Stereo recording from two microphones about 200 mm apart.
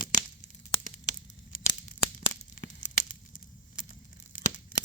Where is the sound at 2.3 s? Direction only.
40° left (ahead or behind).